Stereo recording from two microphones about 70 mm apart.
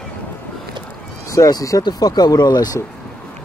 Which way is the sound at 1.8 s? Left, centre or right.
Left.